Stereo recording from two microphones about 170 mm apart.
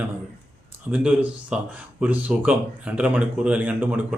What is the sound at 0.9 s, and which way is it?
Speech, 5° right (ahead or behind).